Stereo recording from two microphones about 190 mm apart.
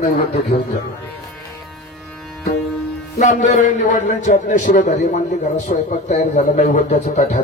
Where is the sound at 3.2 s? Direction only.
40° left (ahead or behind).